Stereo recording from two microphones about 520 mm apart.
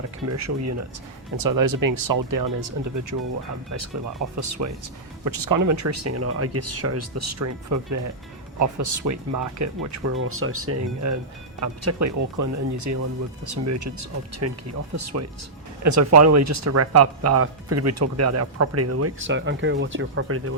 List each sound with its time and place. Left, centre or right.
0.3 s speech: right
4.4 s speech: right